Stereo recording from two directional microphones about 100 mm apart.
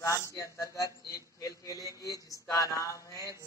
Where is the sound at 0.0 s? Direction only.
35° left (ahead or behind).